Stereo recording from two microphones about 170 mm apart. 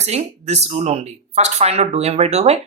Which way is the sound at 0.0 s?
40° right (ahead or behind).